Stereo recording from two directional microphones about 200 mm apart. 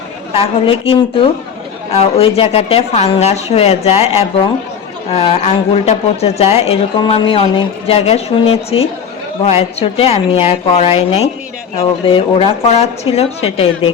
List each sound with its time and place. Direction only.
0.3 s a woman's voice: 25° left (ahead or behind)